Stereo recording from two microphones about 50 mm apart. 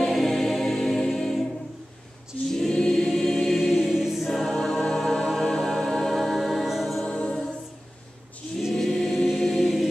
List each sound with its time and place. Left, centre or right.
0.0 s music: centre
2.5 s choir: centre
4.6 s music: centre
7.1 s choir: left
8.7 s choir: centre